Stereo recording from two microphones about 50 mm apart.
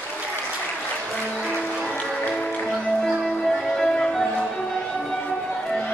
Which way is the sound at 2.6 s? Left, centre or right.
Centre.